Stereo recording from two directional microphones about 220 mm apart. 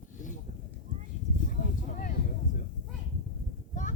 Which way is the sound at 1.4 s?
35° left (ahead or behind).